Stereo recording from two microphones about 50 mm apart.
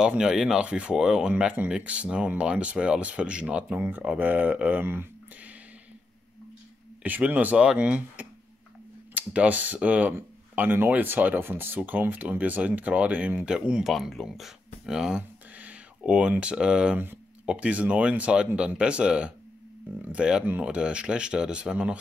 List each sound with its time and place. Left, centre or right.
0.2 s speech: centre
0.7 s speech: right
0.9 s speech: centre
1.9 s speech: right
4.2 s speech: right
7.0 s speech: right
10.5 s speech: right; by 13.8 s centre
13.8 s speech: centre
15.5 s a sound: right
16.1 s speech: right